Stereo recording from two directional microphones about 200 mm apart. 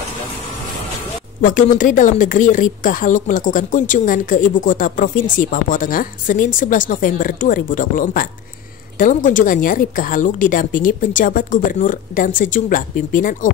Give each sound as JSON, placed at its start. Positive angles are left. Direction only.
{"t": 1.4, "sound": "speech", "side_deg": 40}